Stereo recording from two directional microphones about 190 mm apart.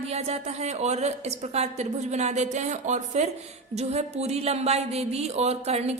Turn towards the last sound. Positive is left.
turn(degrees=-35)  # may be behind; listen again after turning